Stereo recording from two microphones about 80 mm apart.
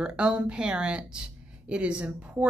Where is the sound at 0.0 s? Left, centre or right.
Centre.